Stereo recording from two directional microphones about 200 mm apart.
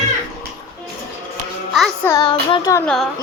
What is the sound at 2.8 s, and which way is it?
Speech, centre (ahead or behind).